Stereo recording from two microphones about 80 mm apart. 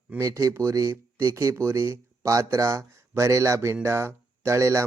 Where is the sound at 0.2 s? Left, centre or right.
Right.